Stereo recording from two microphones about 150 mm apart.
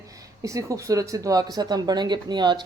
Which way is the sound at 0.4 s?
20° right (ahead or behind).